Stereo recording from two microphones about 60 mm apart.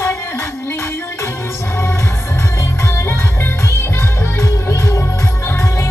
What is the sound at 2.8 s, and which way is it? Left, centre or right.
Music, left.